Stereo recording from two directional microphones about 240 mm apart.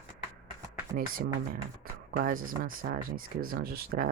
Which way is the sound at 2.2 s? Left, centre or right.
Right.